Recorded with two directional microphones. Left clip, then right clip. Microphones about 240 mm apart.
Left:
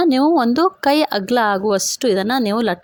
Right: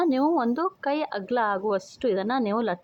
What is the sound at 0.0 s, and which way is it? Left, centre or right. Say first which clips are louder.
Speech: left 8 dB; left.